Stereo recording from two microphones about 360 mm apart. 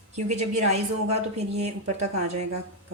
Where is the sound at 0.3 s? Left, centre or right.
Centre.